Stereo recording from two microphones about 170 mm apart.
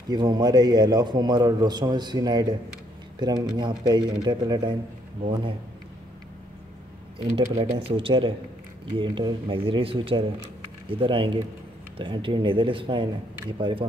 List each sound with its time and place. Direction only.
0.1 s a man's voice: 25° right (ahead or behind)
7.4 s a man's voice: 20° right (ahead or behind)
7.9 s a man's voice: 30° right (ahead or behind)